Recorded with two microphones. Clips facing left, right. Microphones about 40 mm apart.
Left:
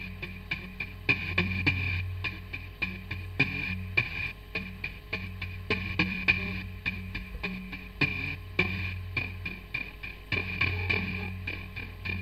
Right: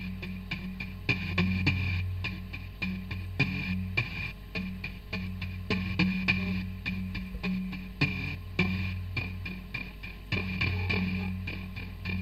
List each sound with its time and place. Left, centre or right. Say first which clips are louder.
0.0 s music: right 1 dB; centre